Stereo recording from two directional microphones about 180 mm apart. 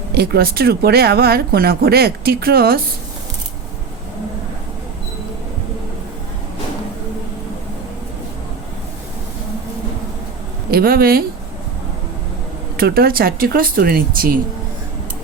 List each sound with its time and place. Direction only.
0.2 s speech: 60° right (ahead or behind)
10.7 s speech: 55° right (ahead or behind)
12.7 s speech: 55° right (ahead or behind)